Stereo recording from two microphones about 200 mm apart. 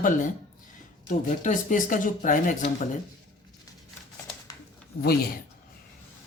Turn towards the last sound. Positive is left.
turn(degrees=50)  # may be behind; listen again after turning